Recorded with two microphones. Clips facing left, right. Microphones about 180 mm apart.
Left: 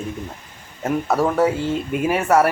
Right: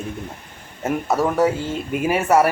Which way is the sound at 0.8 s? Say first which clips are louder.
Left 1 dB; centre (ahead or behind).